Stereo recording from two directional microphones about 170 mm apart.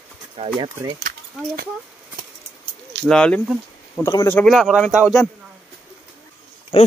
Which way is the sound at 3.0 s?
5° left (ahead or behind).